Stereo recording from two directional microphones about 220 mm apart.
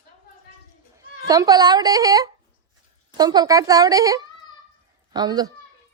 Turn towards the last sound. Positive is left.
turn(degrees=-20)  # may be behind; listen again after turning